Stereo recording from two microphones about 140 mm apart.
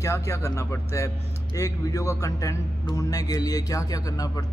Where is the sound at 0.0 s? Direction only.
20° left (ahead or behind).